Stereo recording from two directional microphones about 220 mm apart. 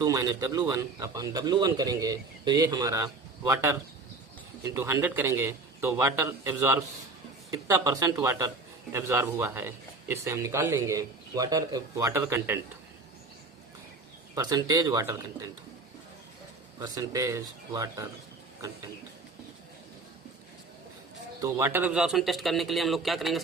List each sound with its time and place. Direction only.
0.0 s a man's voice: 15° right (ahead or behind)
14.3 s a man's voice: 15° right (ahead or behind)
16.8 s a man's voice: 15° right (ahead or behind)
21.4 s speech: 10° right (ahead or behind)